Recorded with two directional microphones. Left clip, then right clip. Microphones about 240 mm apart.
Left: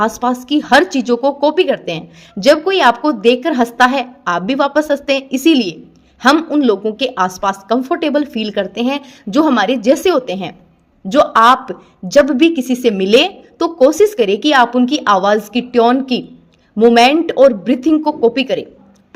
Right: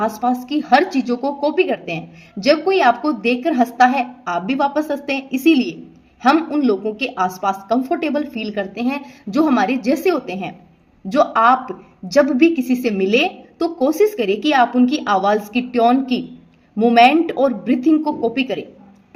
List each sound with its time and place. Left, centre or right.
0.0 s speech: left